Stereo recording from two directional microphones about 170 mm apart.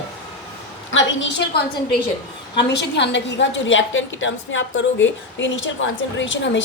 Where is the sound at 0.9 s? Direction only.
90° left.